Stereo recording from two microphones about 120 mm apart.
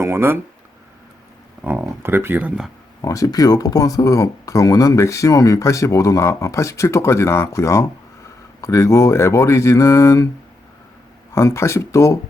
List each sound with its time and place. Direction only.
0.0 s speech: 20° right (ahead or behind)
1.6 s speech: 20° right (ahead or behind)
3.0 s speech: 30° left (ahead or behind)
11.3 s speech: 25° left (ahead or behind)